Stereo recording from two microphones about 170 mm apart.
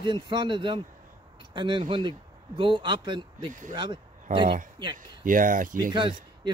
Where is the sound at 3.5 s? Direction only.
50° right (ahead or behind).